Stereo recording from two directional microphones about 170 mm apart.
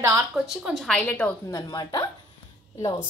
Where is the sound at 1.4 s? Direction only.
20° left (ahead or behind).